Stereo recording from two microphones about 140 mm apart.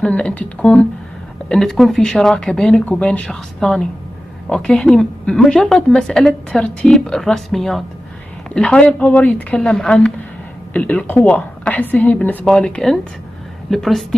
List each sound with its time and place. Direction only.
0.0 s a woman's voice: 10° left (ahead or behind)